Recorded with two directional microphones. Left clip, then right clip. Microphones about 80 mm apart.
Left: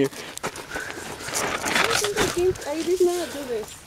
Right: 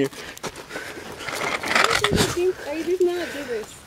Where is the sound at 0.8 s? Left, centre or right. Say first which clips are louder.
Left 1 dB; right.